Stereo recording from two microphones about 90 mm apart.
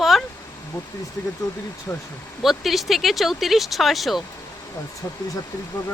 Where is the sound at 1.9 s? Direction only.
35° left (ahead or behind).